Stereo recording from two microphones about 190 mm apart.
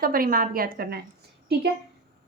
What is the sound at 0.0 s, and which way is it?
A woman's voice, 50° right (ahead or behind).